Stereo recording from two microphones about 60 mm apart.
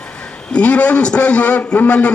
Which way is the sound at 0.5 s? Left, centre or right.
Left.